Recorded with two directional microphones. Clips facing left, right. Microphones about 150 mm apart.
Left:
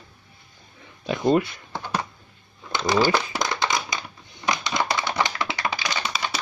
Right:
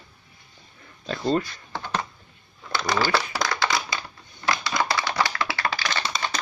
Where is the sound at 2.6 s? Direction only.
20° left (ahead or behind).